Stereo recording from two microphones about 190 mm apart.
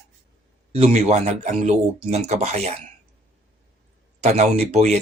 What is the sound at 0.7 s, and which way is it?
Speech, 35° right (ahead or behind).